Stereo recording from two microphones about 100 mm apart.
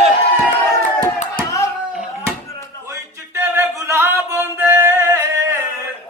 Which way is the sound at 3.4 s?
25° right (ahead or behind).